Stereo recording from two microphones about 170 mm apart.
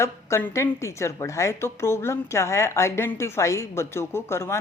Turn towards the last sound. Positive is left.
turn(degrees=15)  # may be behind; listen again after turning